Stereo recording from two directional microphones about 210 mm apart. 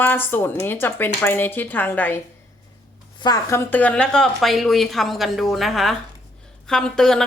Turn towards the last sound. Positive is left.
turn(degrees=0)  # may be behind; listen again after turning